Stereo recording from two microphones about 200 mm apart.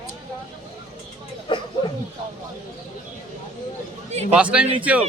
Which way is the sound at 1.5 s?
25° left (ahead or behind).